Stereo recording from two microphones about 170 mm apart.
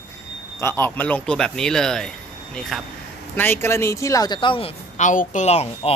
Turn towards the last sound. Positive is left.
turn(degrees=40)  # may be behind; listen again after turning